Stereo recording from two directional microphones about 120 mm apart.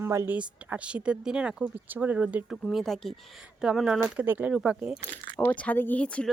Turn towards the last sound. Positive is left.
turn(degrees=10)  # may be behind; listen again after turning